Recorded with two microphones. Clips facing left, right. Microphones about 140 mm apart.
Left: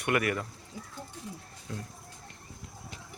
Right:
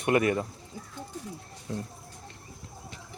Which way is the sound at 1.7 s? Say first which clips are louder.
Right 5 dB; 25° right (ahead or behind).